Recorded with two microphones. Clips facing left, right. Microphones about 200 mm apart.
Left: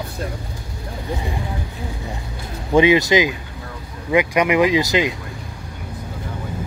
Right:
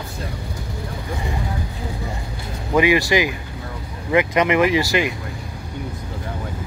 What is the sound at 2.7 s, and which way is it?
Speech, 20° left (ahead or behind).